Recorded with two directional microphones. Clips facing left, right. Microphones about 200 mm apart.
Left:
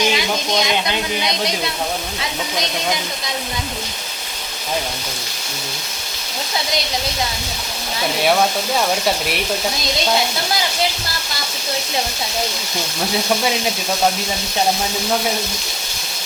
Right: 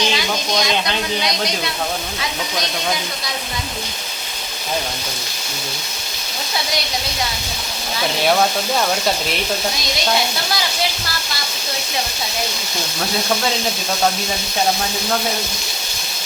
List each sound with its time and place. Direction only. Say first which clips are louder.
0.0 s speech: left 2 dB; 20° left (ahead or behind)
8.2 s speech: even; centre (ahead or behind)